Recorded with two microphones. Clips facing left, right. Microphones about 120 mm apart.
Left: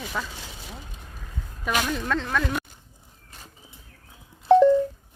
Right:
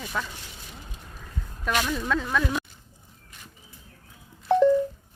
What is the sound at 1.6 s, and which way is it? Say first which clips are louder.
Speech: even; 5° left (ahead or behind).